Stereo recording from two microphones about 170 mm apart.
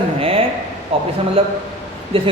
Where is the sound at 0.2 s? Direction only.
35° right (ahead or behind).